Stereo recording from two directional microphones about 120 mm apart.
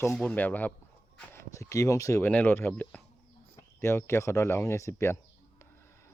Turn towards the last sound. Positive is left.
turn(degrees=25)  # may be behind; listen again after turning